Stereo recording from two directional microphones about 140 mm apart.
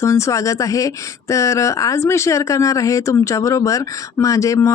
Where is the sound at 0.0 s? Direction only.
20° left (ahead or behind).